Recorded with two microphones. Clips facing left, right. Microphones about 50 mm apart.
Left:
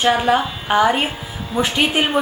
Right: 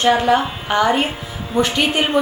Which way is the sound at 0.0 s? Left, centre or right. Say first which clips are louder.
Right 1 dB; centre.